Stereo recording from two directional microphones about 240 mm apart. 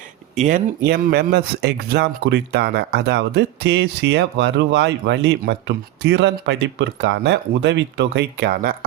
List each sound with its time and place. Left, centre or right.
0.3 s speech: right
0.9 s speech: right